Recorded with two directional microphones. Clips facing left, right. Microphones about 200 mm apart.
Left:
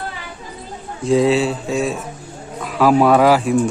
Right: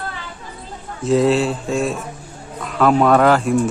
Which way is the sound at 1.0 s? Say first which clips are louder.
Left 1 dB; centre (ahead or behind).